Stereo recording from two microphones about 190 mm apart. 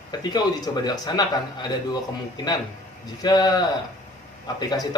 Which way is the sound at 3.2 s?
20° left (ahead or behind).